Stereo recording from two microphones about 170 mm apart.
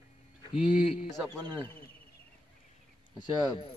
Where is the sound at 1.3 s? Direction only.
25° right (ahead or behind).